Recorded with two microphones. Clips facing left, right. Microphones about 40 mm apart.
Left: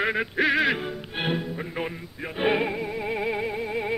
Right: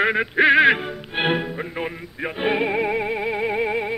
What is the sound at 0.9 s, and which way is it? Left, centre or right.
Music, centre.